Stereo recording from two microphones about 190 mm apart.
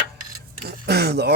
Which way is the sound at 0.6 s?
55° right (ahead or behind).